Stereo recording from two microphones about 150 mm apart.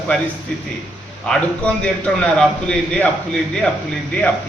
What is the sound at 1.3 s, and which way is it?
A man's voice, 5° left (ahead or behind).